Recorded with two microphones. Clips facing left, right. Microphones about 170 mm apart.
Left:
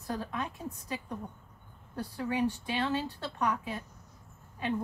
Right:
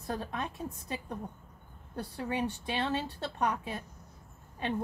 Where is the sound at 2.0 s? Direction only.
25° right (ahead or behind).